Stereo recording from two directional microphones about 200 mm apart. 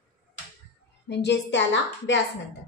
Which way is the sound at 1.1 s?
60° left (ahead or behind).